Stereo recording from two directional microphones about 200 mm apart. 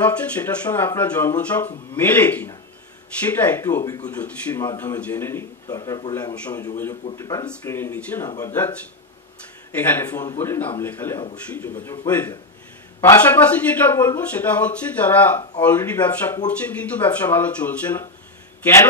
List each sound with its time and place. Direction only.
0.0 s speech: 10° left (ahead or behind)
9.8 s speech: 10° left (ahead or behind)